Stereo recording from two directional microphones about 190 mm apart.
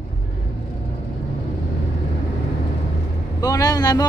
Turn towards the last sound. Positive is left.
turn(degrees=20)  # may be behind; listen again after turning